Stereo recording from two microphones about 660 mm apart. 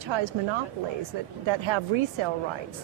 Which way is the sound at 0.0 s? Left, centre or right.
Right.